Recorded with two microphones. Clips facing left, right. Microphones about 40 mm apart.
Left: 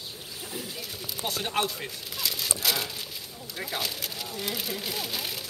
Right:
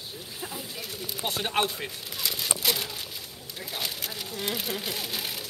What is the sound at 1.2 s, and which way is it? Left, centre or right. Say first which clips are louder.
Speech: right 1 dB; centre.